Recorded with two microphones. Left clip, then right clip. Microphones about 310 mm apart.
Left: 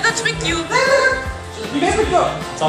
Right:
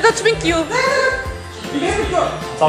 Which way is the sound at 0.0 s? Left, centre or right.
Centre.